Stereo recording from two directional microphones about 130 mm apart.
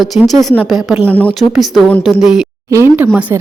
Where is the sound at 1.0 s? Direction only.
15° left (ahead or behind).